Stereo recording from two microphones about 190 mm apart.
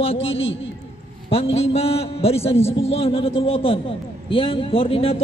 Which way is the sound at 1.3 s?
30° left (ahead or behind).